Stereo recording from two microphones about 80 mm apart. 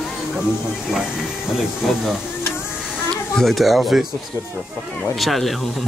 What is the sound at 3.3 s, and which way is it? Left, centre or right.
Speech, centre.